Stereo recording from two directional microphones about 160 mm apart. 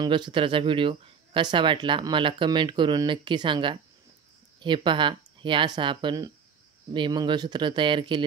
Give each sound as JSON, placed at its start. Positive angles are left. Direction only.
{"t": 0.0, "sound": "speech", "side_deg": -30}